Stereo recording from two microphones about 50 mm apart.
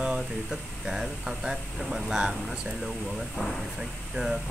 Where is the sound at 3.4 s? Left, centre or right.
Centre.